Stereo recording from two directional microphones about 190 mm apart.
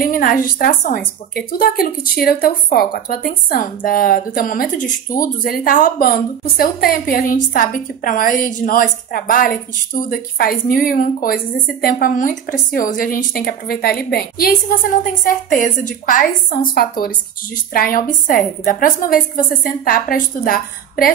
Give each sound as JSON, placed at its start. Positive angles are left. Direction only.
{"t": 0.0, "sound": "speech", "side_deg": 50}